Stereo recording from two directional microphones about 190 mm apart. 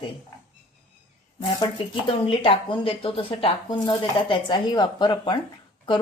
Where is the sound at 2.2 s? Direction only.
25° left (ahead or behind).